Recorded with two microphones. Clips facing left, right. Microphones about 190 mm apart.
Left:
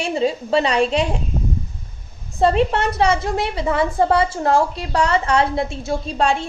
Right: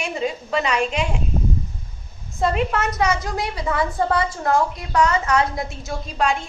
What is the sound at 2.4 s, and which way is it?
A woman's voice, 30° left (ahead or behind).